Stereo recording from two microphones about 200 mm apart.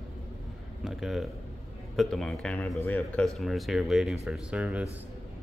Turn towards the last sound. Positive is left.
turn(degrees=-5)  # may be behind; listen again after turning